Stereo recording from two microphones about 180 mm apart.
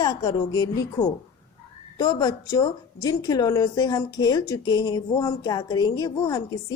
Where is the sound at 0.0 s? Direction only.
20° left (ahead or behind).